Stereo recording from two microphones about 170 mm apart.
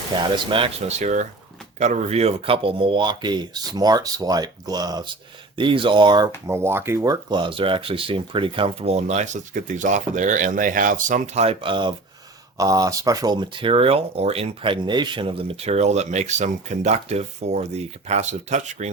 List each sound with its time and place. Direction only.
0.3 s speech: 30° right (ahead or behind)
6.5 s speech: 15° right (ahead or behind); by 11.4 s 50° right (ahead or behind)
11.4 s speech: 30° right (ahead or behind); by 18.9 s 45° right (ahead or behind)